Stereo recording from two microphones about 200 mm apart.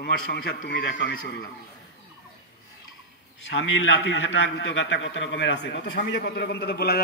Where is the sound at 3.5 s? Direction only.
75° left (ahead or behind); by 7.0 s 55° left (ahead or behind).